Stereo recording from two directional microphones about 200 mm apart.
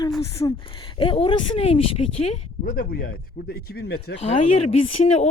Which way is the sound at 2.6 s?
45° left (ahead or behind).